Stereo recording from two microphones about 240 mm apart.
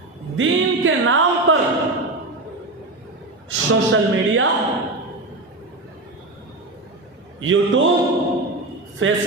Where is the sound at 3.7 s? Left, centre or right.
Right.